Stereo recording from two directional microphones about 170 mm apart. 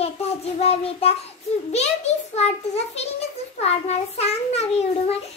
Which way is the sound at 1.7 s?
40° left (ahead or behind).